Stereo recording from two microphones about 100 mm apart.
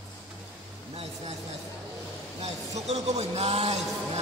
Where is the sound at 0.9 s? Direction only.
90° right.